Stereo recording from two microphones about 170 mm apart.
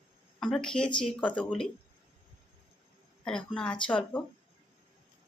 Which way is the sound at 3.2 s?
5° left (ahead or behind).